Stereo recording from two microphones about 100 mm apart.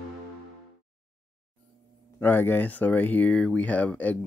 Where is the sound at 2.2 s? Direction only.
20° left (ahead or behind).